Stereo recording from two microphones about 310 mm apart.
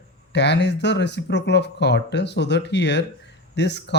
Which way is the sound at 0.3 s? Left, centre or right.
Left.